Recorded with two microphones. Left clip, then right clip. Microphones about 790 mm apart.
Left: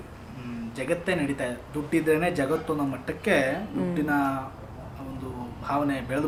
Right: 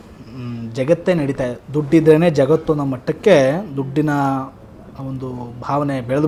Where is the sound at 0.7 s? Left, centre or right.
Right.